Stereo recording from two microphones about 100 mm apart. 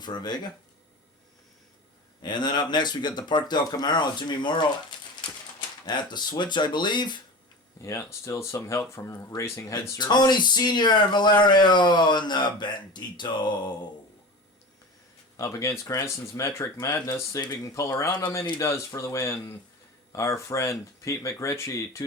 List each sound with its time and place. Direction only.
0.0 s speech: 45° left (ahead or behind)
2.2 s speech: 45° left (ahead or behind)
7.8 s speech: 30° left (ahead or behind)
10.0 s speech: 45° left (ahead or behind)
15.4 s speech: 30° left (ahead or behind)
18.1 s speech: 50° left (ahead or behind)
18.6 s speech: 30° left (ahead or behind)